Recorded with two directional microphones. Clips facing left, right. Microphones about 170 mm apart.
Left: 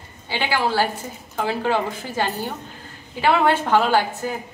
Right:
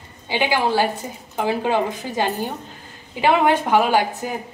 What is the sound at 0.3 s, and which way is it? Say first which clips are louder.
A woman's voice: right 3 dB; 15° right (ahead or behind).